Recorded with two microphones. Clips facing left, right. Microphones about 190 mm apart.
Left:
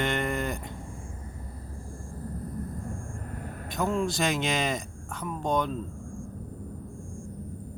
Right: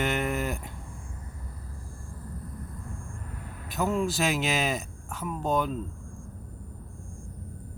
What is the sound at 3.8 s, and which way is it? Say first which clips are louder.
Speech: even; 5° right (ahead or behind).